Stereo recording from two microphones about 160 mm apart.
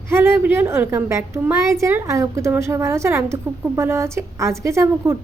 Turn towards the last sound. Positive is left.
turn(degrees=-15)  # may be behind; listen again after turning